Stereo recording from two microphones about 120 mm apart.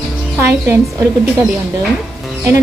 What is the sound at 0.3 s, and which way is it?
A woman's voice, 20° right (ahead or behind).